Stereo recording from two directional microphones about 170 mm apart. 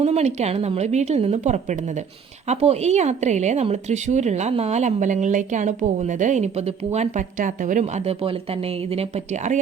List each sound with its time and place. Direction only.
0.0 s a woman's voice: 40° right (ahead or behind)